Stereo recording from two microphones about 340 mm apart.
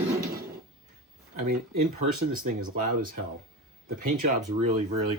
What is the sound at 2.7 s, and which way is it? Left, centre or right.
Speech, right.